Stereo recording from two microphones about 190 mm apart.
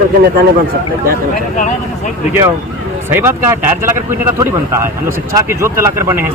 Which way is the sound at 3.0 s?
10° right (ahead or behind).